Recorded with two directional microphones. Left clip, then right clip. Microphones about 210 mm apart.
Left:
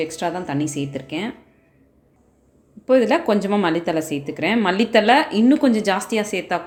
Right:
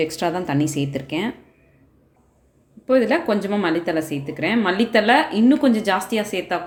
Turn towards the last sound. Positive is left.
turn(degrees=10)  # may be behind; listen again after turning